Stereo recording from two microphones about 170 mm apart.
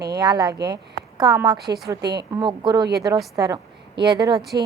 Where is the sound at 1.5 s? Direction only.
70° right (ahead or behind).